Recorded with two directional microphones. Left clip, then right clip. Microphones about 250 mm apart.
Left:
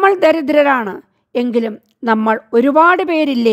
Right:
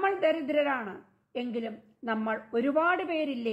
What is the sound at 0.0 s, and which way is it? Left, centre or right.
A woman's voice, left.